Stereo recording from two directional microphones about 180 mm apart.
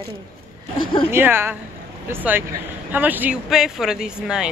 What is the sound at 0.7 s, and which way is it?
Speech, 30° left (ahead or behind).